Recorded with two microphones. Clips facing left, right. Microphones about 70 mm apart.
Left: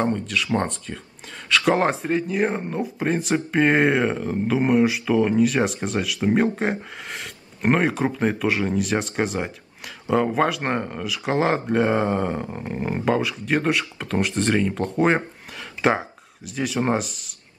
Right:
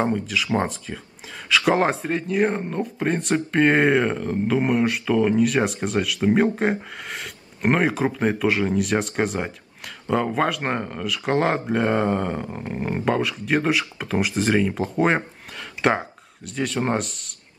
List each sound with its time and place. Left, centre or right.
0.1 s speech: centre